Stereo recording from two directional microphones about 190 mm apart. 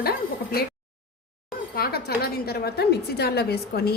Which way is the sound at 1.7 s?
55° left (ahead or behind).